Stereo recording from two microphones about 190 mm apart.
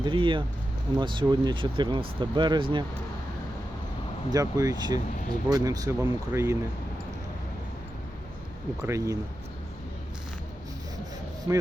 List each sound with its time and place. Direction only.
0.0 s speech: 25° right (ahead or behind)
4.3 s speech: 20° right (ahead or behind)
8.8 s speech: 15° right (ahead or behind)